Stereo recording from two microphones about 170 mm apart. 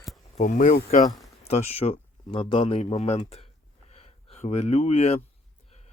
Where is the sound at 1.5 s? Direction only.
35° left (ahead or behind).